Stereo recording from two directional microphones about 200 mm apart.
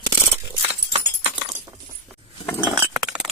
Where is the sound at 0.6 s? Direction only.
25° right (ahead or behind).